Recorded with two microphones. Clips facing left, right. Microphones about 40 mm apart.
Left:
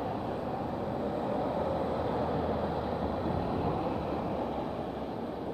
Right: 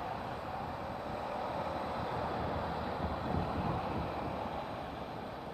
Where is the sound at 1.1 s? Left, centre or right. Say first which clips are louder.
Left 5 dB; centre.